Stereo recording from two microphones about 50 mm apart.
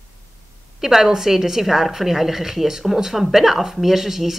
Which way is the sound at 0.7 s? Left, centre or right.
Centre.